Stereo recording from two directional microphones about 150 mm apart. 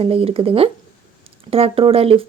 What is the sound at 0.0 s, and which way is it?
Speech, 40° right (ahead or behind).